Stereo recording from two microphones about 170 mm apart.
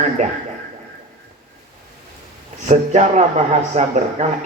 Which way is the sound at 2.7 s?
45° right (ahead or behind).